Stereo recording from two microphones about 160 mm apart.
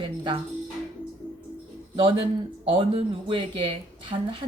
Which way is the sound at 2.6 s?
35° right (ahead or behind).